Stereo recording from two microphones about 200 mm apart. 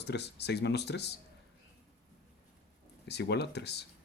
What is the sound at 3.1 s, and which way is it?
Speech, 55° left (ahead or behind).